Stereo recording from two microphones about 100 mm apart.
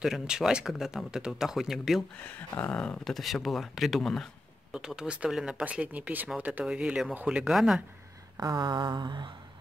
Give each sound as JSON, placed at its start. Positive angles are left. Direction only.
{"t": 0.0, "sound": "speech", "side_deg": -5}
{"t": 2.1, "sound": "speech", "side_deg": 15}
{"t": 3.0, "sound": "speech", "side_deg": 0}
{"t": 4.7, "sound": "speech", "side_deg": -5}
{"t": 8.4, "sound": "a sound", "side_deg": -45}